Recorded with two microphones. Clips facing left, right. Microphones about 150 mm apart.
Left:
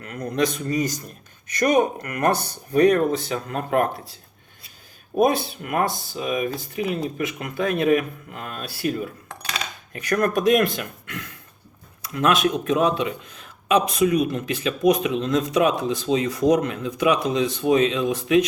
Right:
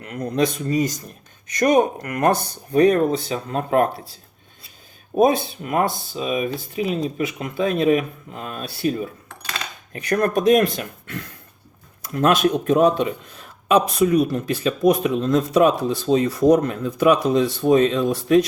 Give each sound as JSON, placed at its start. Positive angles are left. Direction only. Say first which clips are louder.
{"t": 0.0, "sound": "speech", "louder": "right 2 dB", "side_deg": -30}
{"t": 5.1, "sound": "speech", "louder": "right 2 dB", "side_deg": -25}
{"t": 9.9, "sound": "speech", "louder": "right 2 dB", "side_deg": -35}
{"t": 14.0, "sound": "speech", "louder": "right 2 dB", "side_deg": -35}